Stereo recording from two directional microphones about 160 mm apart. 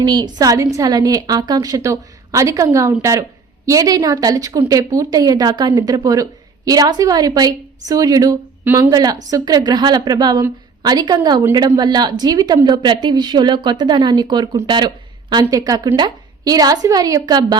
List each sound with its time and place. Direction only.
0.0 s a woman's voice: 25° right (ahead or behind)